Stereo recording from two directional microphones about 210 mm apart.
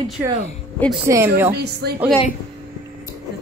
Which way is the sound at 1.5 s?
50° right (ahead or behind).